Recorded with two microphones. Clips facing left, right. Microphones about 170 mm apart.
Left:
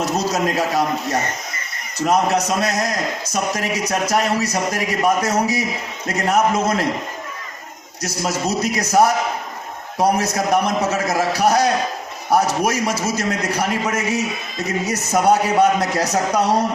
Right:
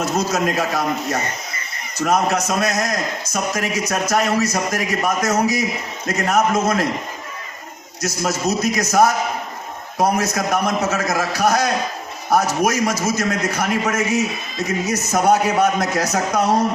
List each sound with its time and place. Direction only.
0.0 s a man's voice: 35° left (ahead or behind)
2.0 s a man's voice: 35° left (ahead or behind)
8.0 s a man's voice: 30° left (ahead or behind)